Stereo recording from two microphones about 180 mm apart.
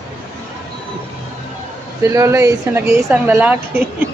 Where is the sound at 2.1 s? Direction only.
15° right (ahead or behind).